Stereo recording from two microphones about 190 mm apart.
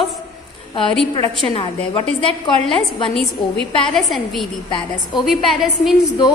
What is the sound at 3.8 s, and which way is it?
A woman's voice, centre (ahead or behind).